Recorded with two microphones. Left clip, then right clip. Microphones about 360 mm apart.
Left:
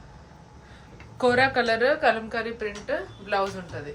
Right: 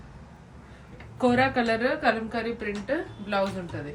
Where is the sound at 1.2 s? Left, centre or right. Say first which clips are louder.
Left 2 dB; left.